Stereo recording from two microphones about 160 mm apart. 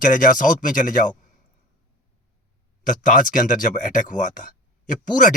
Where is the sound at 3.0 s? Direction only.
55° left (ahead or behind).